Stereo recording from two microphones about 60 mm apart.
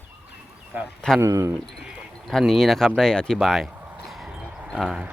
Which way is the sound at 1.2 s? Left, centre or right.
Right.